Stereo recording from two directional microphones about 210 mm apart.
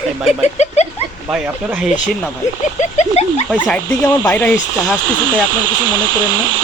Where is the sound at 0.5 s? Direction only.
30° left (ahead or behind).